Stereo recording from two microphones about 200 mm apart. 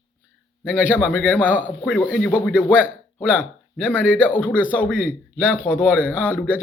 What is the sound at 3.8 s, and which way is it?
Speech, 10° left (ahead or behind).